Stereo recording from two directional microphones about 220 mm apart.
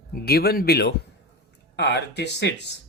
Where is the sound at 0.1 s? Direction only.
45° left (ahead or behind).